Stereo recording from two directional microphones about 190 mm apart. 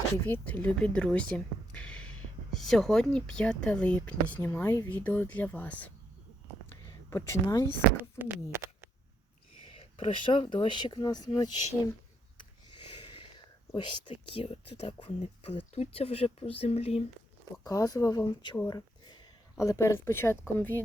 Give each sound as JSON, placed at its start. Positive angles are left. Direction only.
{"t": 0.1, "sound": "speech", "side_deg": 10}
{"t": 7.1, "sound": "speech", "side_deg": 15}
{"t": 8.2, "sound": "speech", "side_deg": -10}
{"t": 9.6, "sound": "speech", "side_deg": 30}
{"t": 13.1, "sound": "a sound", "side_deg": 30}
{"t": 13.7, "sound": "speech", "side_deg": 25}
{"t": 17.6, "sound": "speech", "side_deg": 20}